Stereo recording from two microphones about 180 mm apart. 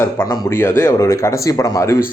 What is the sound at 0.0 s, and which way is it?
Speech, 15° left (ahead or behind).